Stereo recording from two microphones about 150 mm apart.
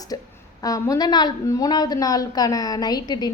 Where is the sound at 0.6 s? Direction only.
25° left (ahead or behind).